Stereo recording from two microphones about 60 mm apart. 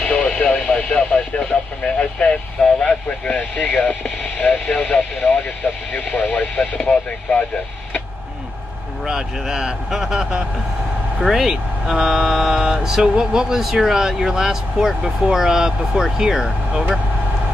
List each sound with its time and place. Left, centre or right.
0.1 s radio: centre
9.0 s a sound: centre
11.1 s speech: centre